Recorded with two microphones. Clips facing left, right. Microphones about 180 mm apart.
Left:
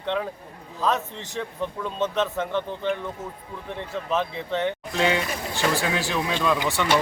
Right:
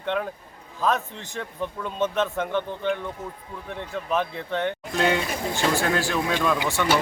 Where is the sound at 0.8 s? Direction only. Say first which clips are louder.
Even; centre (ahead or behind).